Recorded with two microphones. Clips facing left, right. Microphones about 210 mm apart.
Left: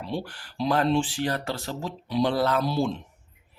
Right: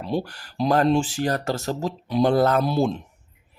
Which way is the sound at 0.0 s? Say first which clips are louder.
Right 5 dB; 45° right (ahead or behind).